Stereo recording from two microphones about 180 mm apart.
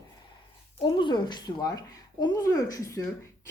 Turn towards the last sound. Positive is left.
turn(degrees=20)  # may be behind; listen again after turning